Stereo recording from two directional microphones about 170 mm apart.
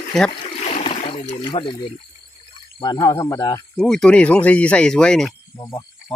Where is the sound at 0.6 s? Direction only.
40° left (ahead or behind).